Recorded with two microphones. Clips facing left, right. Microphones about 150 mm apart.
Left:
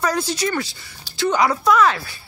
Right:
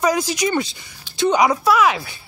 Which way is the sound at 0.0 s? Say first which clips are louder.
Right 3 dB; 10° right (ahead or behind).